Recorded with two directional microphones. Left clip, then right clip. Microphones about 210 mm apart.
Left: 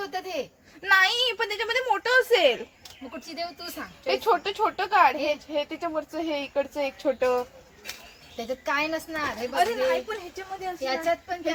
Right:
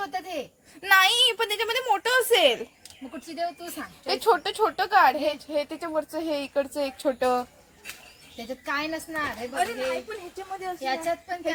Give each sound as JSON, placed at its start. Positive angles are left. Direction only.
{"t": 0.0, "sound": "speech", "side_deg": 15}
{"t": 0.8, "sound": "a woman's voice", "side_deg": -40}
{"t": 4.0, "sound": "speech", "side_deg": -45}
{"t": 8.4, "sound": "a woman's voice", "side_deg": 15}
{"t": 10.8, "sound": "a woman's voice", "side_deg": 10}